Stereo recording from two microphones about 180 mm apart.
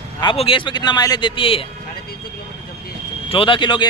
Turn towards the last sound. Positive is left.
turn(degrees=25)  # may be behind; listen again after turning